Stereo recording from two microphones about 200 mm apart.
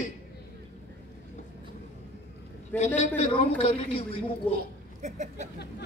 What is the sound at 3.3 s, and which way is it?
Speech, 25° left (ahead or behind).